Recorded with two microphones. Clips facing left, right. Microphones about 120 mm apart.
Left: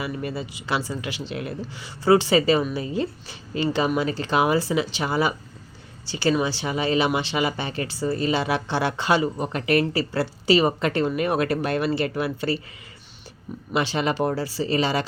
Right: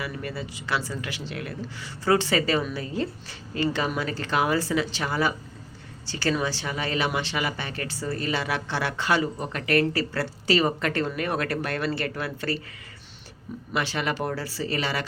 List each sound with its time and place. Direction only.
0.0 s speech: 20° left (ahead or behind)
13.7 s speech: 20° left (ahead or behind)